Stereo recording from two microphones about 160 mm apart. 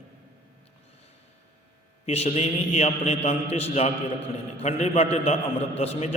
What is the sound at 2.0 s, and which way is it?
A man's voice, 40° left (ahead or behind).